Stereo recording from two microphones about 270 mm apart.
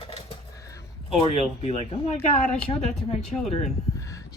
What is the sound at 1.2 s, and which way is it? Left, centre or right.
Speech, left.